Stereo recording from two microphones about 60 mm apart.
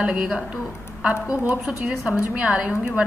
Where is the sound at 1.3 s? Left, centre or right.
Right.